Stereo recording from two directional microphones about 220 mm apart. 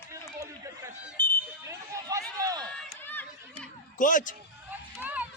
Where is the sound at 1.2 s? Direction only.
10° left (ahead or behind).